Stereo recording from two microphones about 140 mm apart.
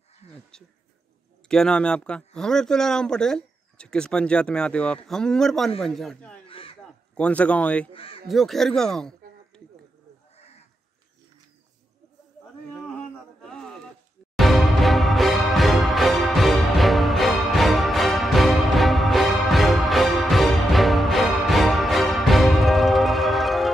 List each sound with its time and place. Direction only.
1.5 s speech: 5° left (ahead or behind)
6.4 s a sound: 40° left (ahead or behind)
6.8 s a man's voice: 10° left (ahead or behind)
7.9 s speech: 40° left (ahead or behind)
8.3 s speech: centre (ahead or behind)
12.9 s a sound: 5° left (ahead or behind)
14.3 s music: centre (ahead or behind)